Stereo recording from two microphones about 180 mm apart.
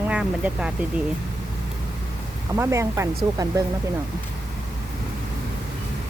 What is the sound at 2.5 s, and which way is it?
Speech, 15° right (ahead or behind).